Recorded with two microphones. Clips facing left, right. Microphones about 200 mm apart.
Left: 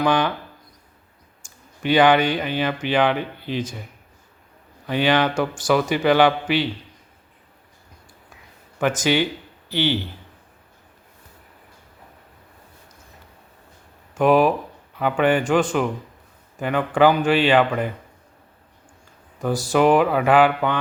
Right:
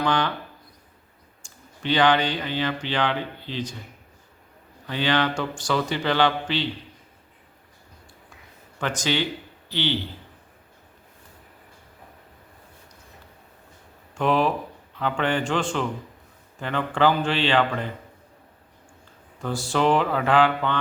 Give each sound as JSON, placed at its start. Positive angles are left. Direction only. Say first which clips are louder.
{"t": 0.0, "sound": "speech", "louder": "left 4 dB", "side_deg": 15}
{"t": 1.8, "sound": "speech", "louder": "left 4 dB", "side_deg": 10}
{"t": 4.9, "sound": "speech", "louder": "left 4 dB", "side_deg": 15}
{"t": 8.8, "sound": "speech", "louder": "left 6 dB", "side_deg": 15}
{"t": 14.2, "sound": "speech", "louder": "left 6 dB", "side_deg": 10}
{"t": 19.4, "sound": "speech", "louder": "left 5 dB", "side_deg": 15}